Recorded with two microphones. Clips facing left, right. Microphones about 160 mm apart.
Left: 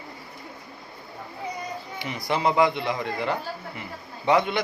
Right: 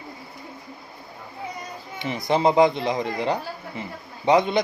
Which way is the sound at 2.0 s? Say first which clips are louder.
Right 5 dB; 20° right (ahead or behind).